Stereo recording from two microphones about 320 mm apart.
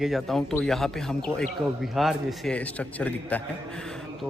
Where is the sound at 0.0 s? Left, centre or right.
Centre.